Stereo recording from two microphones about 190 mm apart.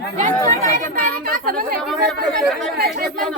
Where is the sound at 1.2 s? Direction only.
50° right (ahead or behind).